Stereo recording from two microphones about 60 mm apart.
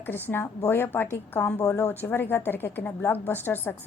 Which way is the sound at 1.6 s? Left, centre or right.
Left.